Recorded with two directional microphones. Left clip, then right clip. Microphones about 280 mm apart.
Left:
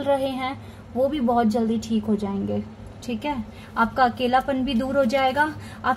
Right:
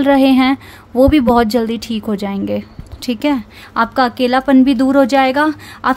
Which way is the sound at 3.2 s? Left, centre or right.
Right.